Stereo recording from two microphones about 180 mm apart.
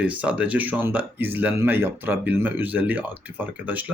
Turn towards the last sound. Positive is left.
turn(degrees=-10)  # may be behind; listen again after turning